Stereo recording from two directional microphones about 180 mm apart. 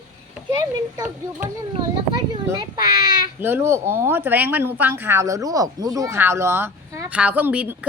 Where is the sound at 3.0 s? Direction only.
15° right (ahead or behind).